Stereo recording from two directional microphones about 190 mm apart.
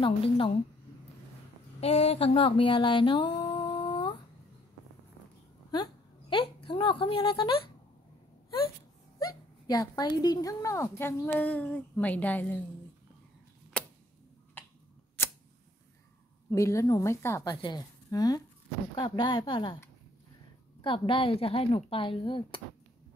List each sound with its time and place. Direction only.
0.0 s a woman's voice: 30° left (ahead or behind)
1.8 s a sound: 30° left (ahead or behind)
6.3 s a woman's voice: 25° left (ahead or behind)
9.3 s a woman's voice: 20° left (ahead or behind)
13.7 s tick-tock: 5° left (ahead or behind)
16.5 s a woman's voice: 15° left (ahead or behind)
20.8 s a woman's voice: 25° left (ahead or behind)